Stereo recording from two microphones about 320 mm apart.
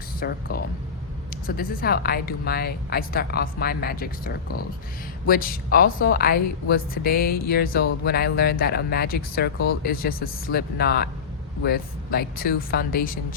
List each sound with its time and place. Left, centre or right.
0.2 s a woman's voice: left
5.2 s a woman's voice: left